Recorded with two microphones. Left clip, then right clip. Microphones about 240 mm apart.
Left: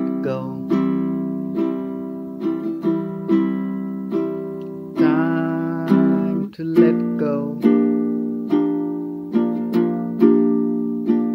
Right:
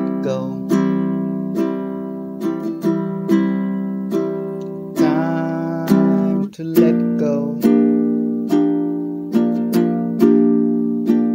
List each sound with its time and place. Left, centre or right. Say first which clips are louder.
0.7 s music: right 2 dB; right
5.0 s music: even; centre
5.9 s music: right 2 dB; right
7.2 s music: right 2 dB; centre
7.6 s music: right 2 dB; right